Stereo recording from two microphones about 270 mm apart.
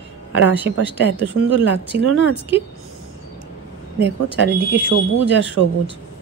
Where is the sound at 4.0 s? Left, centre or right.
Right.